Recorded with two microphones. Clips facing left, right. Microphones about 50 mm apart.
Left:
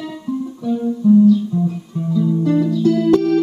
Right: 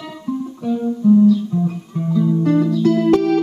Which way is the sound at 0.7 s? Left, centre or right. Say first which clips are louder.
Even; centre.